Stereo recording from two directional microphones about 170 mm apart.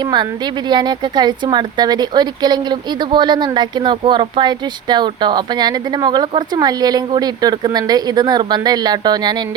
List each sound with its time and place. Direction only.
0.0 s speech: 25° right (ahead or behind)